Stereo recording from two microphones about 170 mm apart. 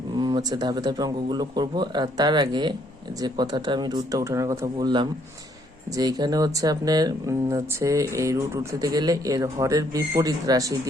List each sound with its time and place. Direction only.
0.2 s speech: 25° right (ahead or behind)